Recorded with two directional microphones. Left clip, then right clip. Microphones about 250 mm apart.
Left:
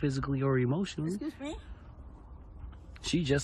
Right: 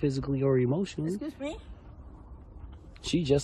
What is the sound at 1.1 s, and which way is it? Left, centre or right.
Speech, centre.